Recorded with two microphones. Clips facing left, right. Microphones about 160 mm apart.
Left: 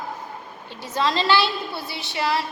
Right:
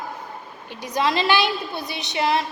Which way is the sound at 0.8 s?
15° right (ahead or behind).